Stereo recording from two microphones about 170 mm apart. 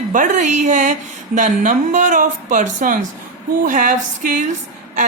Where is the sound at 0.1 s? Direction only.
45° right (ahead or behind).